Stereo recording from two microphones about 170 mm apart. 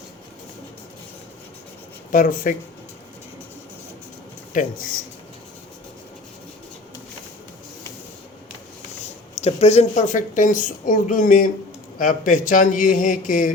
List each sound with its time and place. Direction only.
2.1 s a woman's voice: 55° left (ahead or behind)
4.5 s a woman's voice: 55° left (ahead or behind)
9.4 s a woman's voice: 40° left (ahead or behind)